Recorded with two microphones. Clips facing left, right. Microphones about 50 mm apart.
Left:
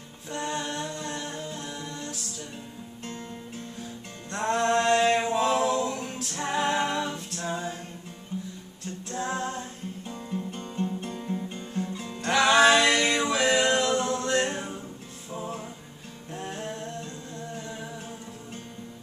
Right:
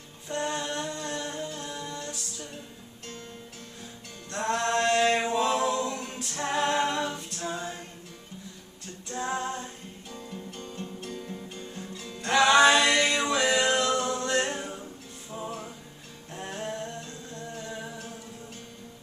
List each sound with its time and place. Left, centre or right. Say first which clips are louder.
0.3 s music: right 1 dB; centre
4.3 s music: left 3 dB; left
4.7 s a capella: left 1 dB; centre
6.1 s music: left 1 dB; centre
6.4 s music: even; centre
9.1 s female singing: even; centre
10.0 s music: left 5 dB; left
12.2 s music: even; centre
13.9 s a capella: left 2 dB; centre
14.2 s music: left 1 dB; centre
16.3 s music: right 1 dB; centre
17.6 s humming: even; centre